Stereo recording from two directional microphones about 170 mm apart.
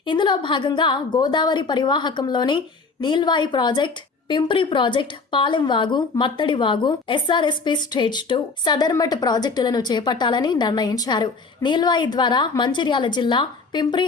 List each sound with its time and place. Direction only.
0.0 s a woman's voice: 25° left (ahead or behind)